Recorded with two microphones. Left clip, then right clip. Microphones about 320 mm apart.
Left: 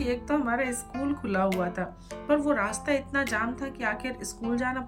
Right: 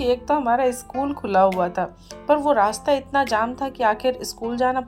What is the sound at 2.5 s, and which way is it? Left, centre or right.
A woman's voice, right.